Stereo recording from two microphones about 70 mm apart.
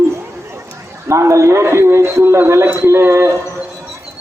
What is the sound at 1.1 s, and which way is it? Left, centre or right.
Speech, right.